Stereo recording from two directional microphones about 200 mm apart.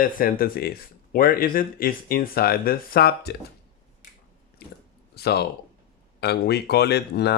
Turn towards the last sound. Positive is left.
turn(degrees=55)  # may be behind; listen again after turning